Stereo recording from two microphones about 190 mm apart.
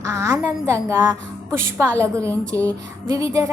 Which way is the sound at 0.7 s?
15° right (ahead or behind).